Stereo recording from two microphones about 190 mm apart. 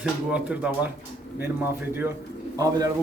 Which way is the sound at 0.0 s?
5° right (ahead or behind).